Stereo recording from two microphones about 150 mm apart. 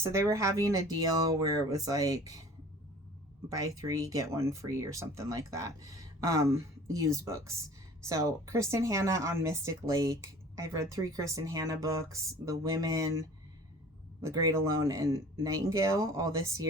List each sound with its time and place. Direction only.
0.0 s speech: 20° right (ahead or behind)
3.5 s speech: 25° right (ahead or behind)
14.2 s speech: 20° right (ahead or behind)